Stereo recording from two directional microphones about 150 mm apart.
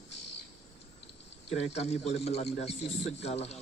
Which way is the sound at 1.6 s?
45° left (ahead or behind).